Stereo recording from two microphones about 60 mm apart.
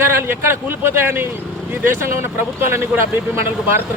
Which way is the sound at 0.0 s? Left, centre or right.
Right.